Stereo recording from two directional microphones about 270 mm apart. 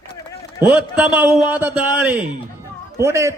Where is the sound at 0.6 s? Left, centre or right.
Centre.